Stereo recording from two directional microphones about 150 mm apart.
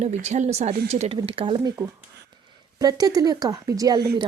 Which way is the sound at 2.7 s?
25° right (ahead or behind).